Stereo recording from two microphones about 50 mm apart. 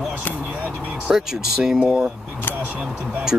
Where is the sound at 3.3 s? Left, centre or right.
Right.